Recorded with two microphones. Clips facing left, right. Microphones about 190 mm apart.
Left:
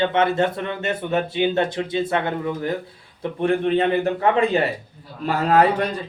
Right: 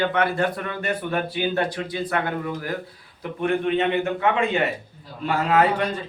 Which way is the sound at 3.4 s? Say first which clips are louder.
Left 3 dB; 35° left (ahead or behind).